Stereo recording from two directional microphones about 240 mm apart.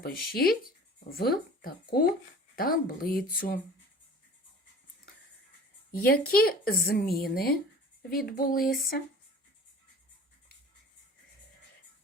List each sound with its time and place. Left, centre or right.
0.0 s a woman's voice: left
5.9 s a woman's voice: left